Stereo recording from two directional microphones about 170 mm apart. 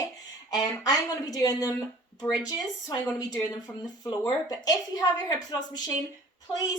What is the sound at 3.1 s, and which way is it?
A woman's voice, 20° left (ahead or behind).